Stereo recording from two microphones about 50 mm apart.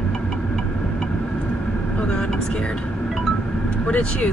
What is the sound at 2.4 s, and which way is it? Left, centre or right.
Speech, centre.